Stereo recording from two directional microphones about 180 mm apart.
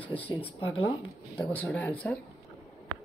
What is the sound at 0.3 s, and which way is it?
Speech, 25° left (ahead or behind).